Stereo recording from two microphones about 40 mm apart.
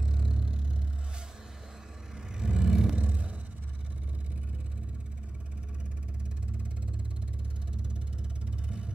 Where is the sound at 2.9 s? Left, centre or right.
Right.